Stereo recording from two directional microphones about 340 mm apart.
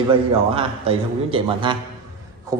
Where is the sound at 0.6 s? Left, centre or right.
Centre.